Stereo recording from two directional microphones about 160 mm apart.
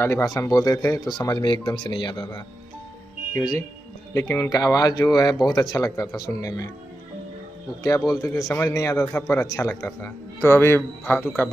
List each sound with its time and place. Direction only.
0.0 s speech: 20° left (ahead or behind)
3.3 s speech: 20° left (ahead or behind)
8.1 s a man's voice: 20° left (ahead or behind)